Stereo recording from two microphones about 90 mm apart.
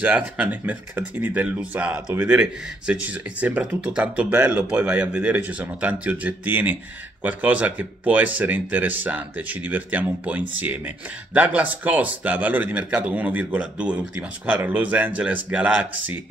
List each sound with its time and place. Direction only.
0.0 s speech: 15° right (ahead or behind)